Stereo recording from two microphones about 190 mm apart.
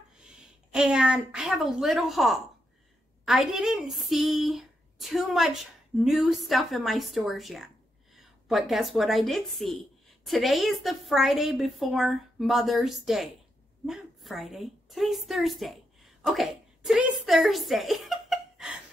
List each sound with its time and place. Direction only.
0.7 s a woman's voice: 5° right (ahead or behind)